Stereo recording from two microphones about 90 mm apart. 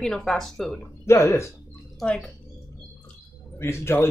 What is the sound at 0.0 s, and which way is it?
Speech, 5° left (ahead or behind).